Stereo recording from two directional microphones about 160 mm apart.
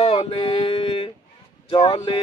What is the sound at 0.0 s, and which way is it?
Mantra, 40° left (ahead or behind).